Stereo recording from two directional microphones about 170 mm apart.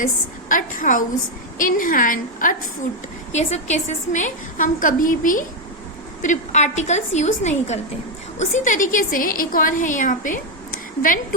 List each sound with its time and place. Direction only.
0.0 s a woman's voice: 50° left (ahead or behind)